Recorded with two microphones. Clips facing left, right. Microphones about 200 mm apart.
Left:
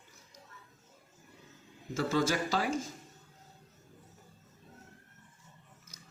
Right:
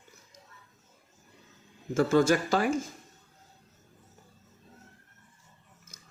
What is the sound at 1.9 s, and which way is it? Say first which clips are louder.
Speech: right 7 dB; 55° right (ahead or behind).